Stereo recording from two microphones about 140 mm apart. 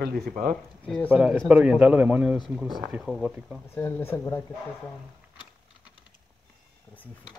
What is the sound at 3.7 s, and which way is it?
Speech, 15° left (ahead or behind).